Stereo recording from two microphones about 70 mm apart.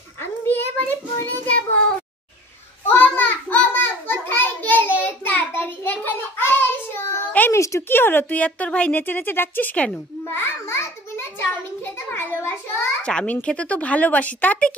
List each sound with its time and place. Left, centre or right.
0.2 s a sound: left
1.2 s child singing: left
2.9 s a sound: left
5.0 s child singing: left
7.5 s a sound: left
7.9 s speech: left
9.0 s speech: left
10.2 s a child's voice: left
13.0 s speech: centre